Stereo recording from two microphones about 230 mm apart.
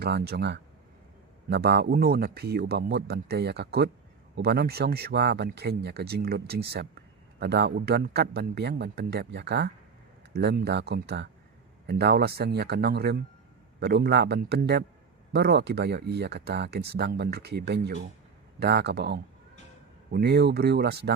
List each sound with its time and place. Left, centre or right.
0.0 s speech: right